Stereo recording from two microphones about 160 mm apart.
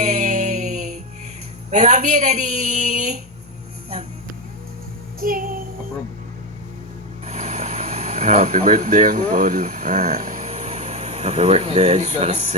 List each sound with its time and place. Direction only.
0.0 s a sound: 50° right (ahead or behind)
1.7 s a woman's voice: 50° right (ahead or behind)
5.2 s child singing: 60° right (ahead or behind)
7.3 s speech: 45° right (ahead or behind)